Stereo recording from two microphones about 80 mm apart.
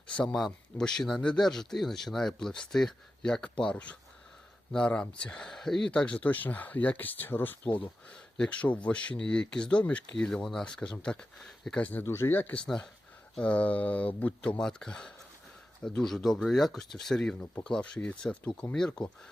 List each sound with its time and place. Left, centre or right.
0.3 s speech: centre; by 7.8 s left
8.1 s speech: centre
11.8 s speech: left
12.0 s speech: left
12.6 s speech: centre
14.6 s speech: centre